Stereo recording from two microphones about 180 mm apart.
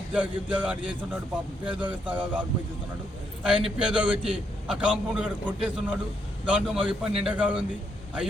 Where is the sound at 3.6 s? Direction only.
5° right (ahead or behind).